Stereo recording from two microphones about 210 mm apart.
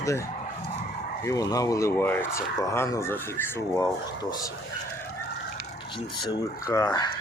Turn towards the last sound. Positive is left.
turn(degrees=15)  # may be behind; listen again after turning